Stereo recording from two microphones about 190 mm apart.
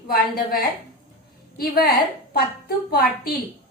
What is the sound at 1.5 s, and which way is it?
A woman's voice, 55° left (ahead or behind).